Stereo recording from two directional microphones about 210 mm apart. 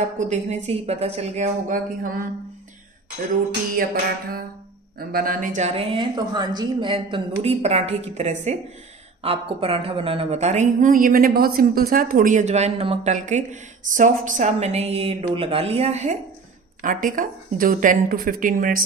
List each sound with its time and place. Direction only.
0.2 s a woman's voice: 35° right (ahead or behind)
3.7 s music: 45° right (ahead or behind)
4.9 s a woman's voice: 45° right (ahead or behind)